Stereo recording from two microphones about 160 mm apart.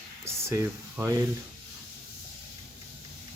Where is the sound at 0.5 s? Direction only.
15° right (ahead or behind).